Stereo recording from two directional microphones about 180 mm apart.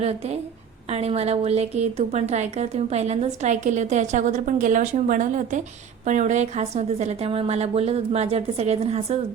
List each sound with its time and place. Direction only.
0.0 s a woman's voice: 35° right (ahead or behind)